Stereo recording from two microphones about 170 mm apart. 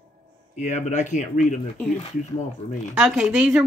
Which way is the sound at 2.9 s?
5° right (ahead or behind).